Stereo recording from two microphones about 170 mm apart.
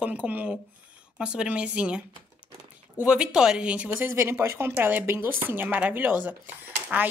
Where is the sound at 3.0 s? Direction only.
5° right (ahead or behind).